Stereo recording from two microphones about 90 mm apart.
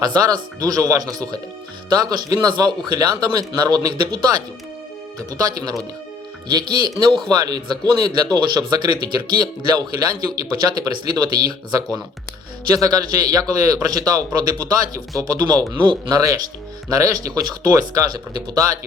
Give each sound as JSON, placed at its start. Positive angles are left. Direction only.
{"t": 0.0, "sound": "speech", "side_deg": -45}
{"t": 5.4, "sound": "speech", "side_deg": -45}